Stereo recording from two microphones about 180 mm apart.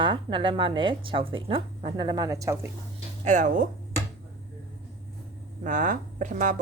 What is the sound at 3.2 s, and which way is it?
Speech, 40° right (ahead or behind).